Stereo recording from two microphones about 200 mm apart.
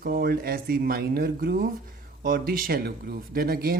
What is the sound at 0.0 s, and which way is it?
Speech, 50° right (ahead or behind).